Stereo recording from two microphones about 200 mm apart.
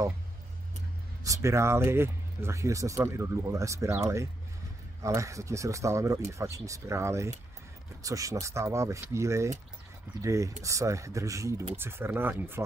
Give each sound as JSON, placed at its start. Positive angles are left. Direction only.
{"t": 1.2, "sound": "speech", "side_deg": -15}